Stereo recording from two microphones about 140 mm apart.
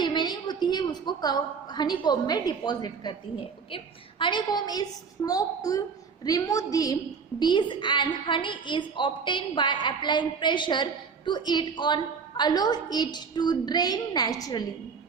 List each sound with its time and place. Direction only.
0.0 s a woman's voice: 30° left (ahead or behind)